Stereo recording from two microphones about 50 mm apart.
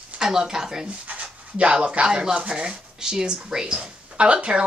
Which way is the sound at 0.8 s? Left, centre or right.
Right.